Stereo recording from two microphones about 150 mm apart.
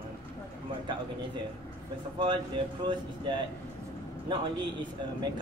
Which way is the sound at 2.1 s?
30° right (ahead or behind).